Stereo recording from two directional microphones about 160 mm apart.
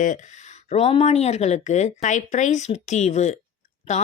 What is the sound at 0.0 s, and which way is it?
A woman's voice, 50° left (ahead or behind).